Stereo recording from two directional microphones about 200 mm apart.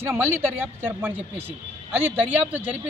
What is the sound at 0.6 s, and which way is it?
Speech, 10° right (ahead or behind).